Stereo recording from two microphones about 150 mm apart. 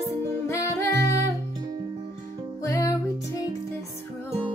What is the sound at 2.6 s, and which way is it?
Music, 20° left (ahead or behind).